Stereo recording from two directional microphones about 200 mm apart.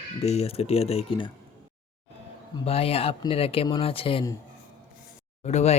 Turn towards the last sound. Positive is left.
turn(degrees=35)  # may be behind; listen again after turning